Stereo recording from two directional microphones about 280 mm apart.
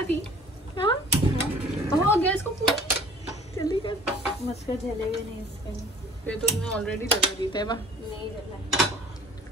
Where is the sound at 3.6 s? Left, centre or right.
Centre.